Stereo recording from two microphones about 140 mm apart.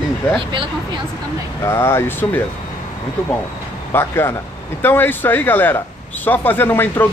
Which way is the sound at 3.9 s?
15° left (ahead or behind).